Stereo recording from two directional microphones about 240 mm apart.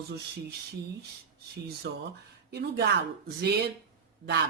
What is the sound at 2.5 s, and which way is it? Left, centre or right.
Speech, right.